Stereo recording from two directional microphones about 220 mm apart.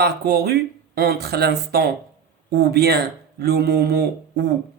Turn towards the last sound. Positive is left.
turn(degrees=-45)  # may be behind; listen again after turning